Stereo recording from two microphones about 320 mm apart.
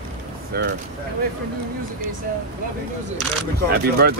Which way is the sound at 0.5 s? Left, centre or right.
Right.